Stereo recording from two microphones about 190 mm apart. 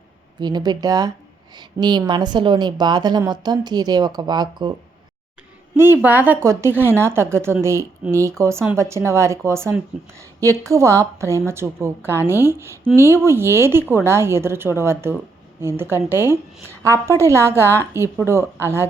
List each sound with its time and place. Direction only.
0.3 s a woman's voice: 20° right (ahead or behind)
5.7 s a woman's voice: 10° right (ahead or behind)